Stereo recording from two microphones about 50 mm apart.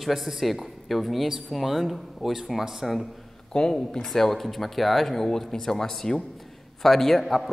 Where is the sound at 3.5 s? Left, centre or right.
Centre.